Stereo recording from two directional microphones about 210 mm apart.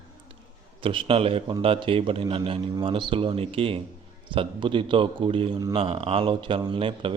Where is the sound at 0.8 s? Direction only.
25° right (ahead or behind).